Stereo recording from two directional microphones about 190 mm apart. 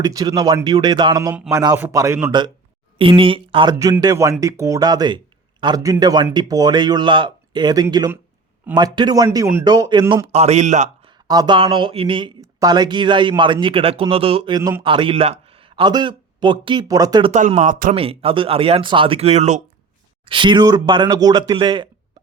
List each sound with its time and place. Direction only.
0.0 s a man's voice: 20° right (ahead or behind)
3.0 s speech: 30° right (ahead or behind)
10.3 s a man's voice: 35° right (ahead or behind)
11.3 s speech: 20° right (ahead or behind)
17.6 s speech: 45° right (ahead or behind)
17.9 s speech: 30° right (ahead or behind)
20.2 s speech: 25° right (ahead or behind)